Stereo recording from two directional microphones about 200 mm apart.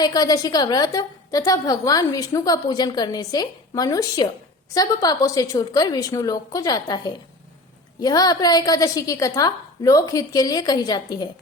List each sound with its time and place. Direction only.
0.0 s a woman's voice: 20° left (ahead or behind)